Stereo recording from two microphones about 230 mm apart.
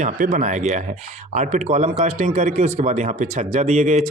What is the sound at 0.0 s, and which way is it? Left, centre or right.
A man's voice, right.